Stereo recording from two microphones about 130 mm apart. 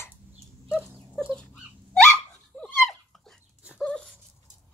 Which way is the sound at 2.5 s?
Centre (ahead or behind).